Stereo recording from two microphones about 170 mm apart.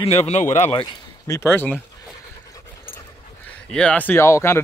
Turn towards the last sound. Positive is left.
turn(degrees=15)  # may be behind; listen again after turning